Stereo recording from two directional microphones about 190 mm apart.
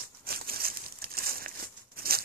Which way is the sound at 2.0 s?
50° right (ahead or behind).